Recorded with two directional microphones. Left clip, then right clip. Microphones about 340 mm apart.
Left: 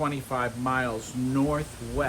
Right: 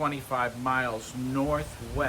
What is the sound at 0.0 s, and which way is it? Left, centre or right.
Speech, centre.